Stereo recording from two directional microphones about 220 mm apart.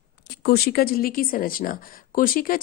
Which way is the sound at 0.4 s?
45° left (ahead or behind).